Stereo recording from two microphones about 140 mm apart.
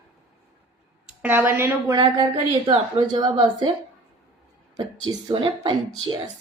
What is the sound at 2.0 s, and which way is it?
A woman's voice, 35° right (ahead or behind).